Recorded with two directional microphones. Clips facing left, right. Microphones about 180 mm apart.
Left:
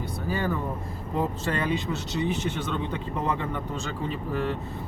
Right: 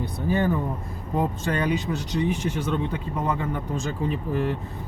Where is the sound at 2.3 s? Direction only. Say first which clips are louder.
Right 3 dB; 10° right (ahead or behind).